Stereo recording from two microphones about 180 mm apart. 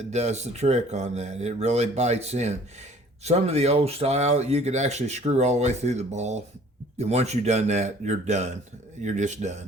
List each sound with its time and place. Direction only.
0.0 s speech: 40° right (ahead or behind)